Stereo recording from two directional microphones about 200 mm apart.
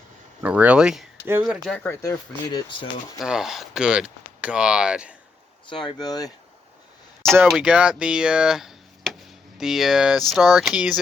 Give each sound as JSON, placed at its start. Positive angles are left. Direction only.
{"t": 0.4, "sound": "speech", "side_deg": -5}
{"t": 2.0, "sound": "speech", "side_deg": 15}
{"t": 3.2, "sound": "speech", "side_deg": 0}
{"t": 5.6, "sound": "speech", "side_deg": 25}
{"t": 7.4, "sound": "speech", "side_deg": -5}